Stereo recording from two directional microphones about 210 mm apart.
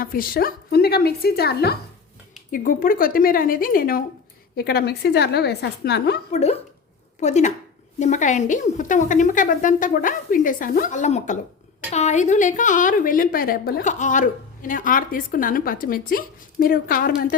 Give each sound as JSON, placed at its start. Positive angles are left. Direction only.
{"t": 0.0, "sound": "a woman's voice", "side_deg": 45}
{"t": 6.3, "sound": "a woman's voice", "side_deg": 30}